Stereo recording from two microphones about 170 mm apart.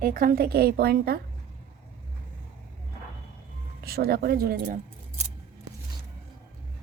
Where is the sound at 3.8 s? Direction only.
65° right (ahead or behind).